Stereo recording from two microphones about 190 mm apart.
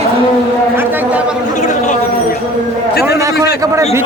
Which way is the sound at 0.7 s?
10° right (ahead or behind).